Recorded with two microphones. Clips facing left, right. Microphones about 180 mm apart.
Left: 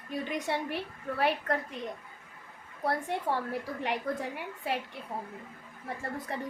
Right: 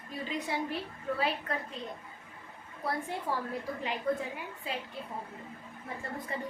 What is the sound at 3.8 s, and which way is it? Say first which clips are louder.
Speech: right 1 dB; 70° left (ahead or behind).